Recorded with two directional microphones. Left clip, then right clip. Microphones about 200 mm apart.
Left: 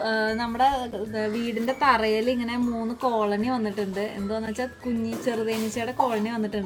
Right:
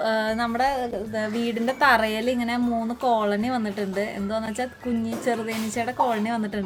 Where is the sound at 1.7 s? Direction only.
30° right (ahead or behind); by 4.6 s 15° right (ahead or behind).